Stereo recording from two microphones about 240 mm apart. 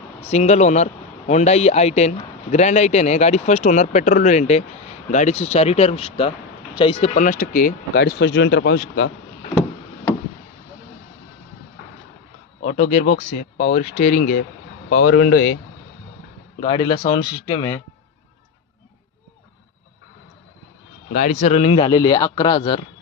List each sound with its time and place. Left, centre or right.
0.2 s a man's voice: left
8.0 s speech: left
12.6 s a man's voice: left
15.0 s speech: left
16.6 s a man's voice: left
21.1 s a man's voice: left